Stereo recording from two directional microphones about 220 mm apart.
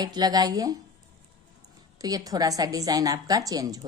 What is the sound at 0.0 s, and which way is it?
Speech, 20° right (ahead or behind).